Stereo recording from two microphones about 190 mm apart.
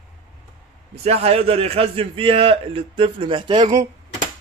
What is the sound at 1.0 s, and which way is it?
A man's voice, 30° right (ahead or behind).